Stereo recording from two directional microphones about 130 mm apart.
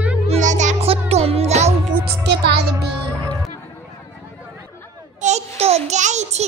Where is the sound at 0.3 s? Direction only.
70° right (ahead or behind).